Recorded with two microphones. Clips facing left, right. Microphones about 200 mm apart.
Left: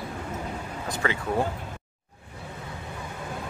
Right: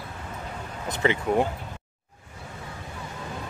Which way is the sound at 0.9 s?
20° right (ahead or behind).